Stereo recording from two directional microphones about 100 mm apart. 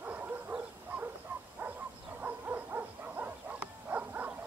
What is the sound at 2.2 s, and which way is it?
Dog, 15° right (ahead or behind).